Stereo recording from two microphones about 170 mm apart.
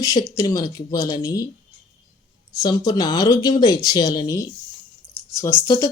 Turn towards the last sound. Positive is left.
turn(degrees=20)  # may be behind; listen again after turning